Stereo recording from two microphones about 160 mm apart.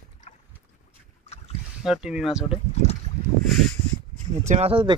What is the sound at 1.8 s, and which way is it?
Speech, 5° right (ahead or behind).